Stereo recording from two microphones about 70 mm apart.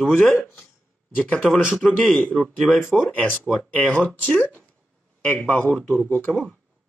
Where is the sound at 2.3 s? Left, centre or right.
Centre.